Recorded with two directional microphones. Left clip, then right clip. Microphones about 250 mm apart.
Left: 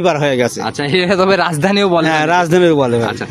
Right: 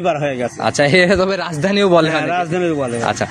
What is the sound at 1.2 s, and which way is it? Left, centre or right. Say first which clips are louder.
Speech: left 5 dB; left.